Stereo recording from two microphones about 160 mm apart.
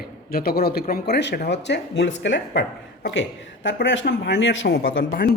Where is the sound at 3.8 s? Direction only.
90° left; by 5.2 s 65° left (ahead or behind).